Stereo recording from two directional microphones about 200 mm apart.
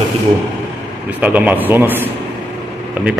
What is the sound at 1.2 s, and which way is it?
A man's voice, 10° right (ahead or behind).